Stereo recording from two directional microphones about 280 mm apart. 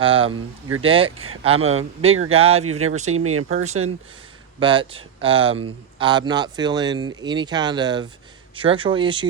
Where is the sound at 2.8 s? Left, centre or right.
Right.